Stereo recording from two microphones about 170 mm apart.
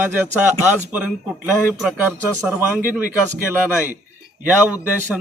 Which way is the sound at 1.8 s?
5° right (ahead or behind).